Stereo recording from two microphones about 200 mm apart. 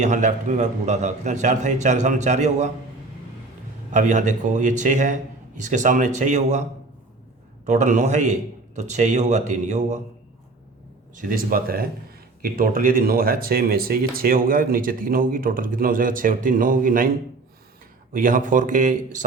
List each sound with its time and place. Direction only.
0.0 s a man's voice: 35° right (ahead or behind)
3.9 s a man's voice: 40° right (ahead or behind)
11.2 s speech: 45° right (ahead or behind)
18.1 s a man's voice: 45° right (ahead or behind)